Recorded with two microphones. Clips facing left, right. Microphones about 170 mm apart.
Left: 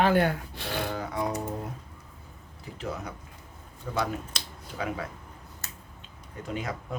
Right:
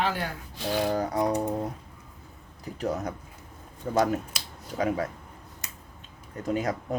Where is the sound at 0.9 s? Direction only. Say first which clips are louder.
Right 5 dB; 40° right (ahead or behind).